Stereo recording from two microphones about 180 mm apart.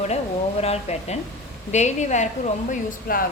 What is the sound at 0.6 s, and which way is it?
Speech, 35° left (ahead or behind).